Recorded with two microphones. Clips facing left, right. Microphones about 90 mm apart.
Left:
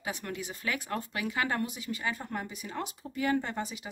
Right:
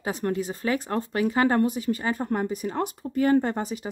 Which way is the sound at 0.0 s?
40° right (ahead or behind).